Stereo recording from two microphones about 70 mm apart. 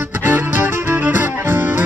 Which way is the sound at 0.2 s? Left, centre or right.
Right.